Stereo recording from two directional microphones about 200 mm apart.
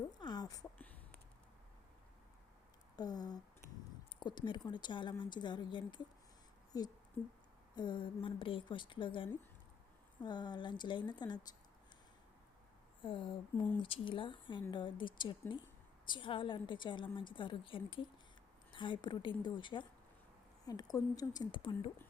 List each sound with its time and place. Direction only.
0.2 s a sound: 20° left (ahead or behind)
2.9 s a woman's voice: 20° left (ahead or behind)
7.8 s a woman's voice: 20° left (ahead or behind)
13.0 s a woman's voice: 25° left (ahead or behind)